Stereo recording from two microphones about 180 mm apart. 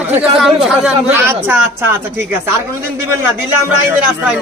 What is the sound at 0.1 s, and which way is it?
Speech, 5° right (ahead or behind).